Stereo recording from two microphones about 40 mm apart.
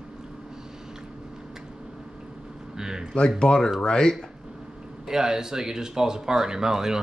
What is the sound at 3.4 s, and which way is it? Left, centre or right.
Speech, left.